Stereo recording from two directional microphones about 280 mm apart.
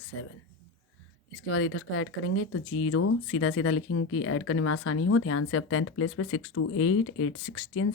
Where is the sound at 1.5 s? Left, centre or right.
Left.